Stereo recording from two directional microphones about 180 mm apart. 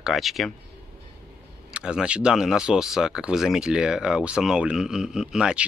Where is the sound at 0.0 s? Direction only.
Centre (ahead or behind).